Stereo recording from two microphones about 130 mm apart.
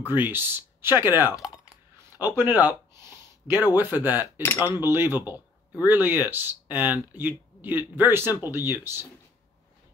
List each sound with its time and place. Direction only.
0.0 s speech: 15° right (ahead or behind)
2.1 s a sound: 15° right (ahead or behind)
3.7 s speech: 15° right (ahead or behind)
4.4 s speech: 20° left (ahead or behind)
4.7 s speech: 20° right (ahead or behind)